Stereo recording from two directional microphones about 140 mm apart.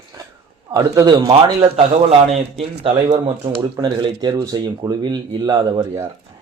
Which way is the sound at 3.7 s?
35° right (ahead or behind).